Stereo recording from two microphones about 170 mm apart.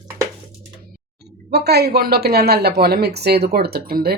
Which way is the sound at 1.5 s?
70° right (ahead or behind).